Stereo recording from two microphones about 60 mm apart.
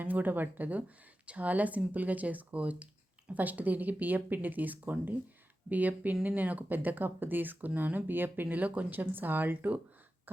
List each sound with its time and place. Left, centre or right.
0.0 s speech: right
10.3 s throat clearing: right